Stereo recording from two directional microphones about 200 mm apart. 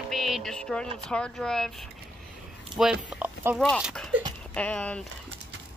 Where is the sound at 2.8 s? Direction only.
5° right (ahead or behind).